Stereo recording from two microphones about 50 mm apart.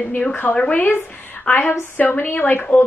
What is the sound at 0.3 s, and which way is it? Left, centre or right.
A woman's voice, left.